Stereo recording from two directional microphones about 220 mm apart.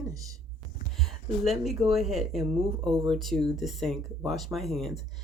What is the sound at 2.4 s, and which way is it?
Speech, 25° right (ahead or behind).